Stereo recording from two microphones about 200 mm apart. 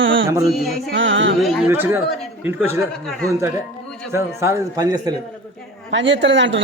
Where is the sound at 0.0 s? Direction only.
70° right (ahead or behind).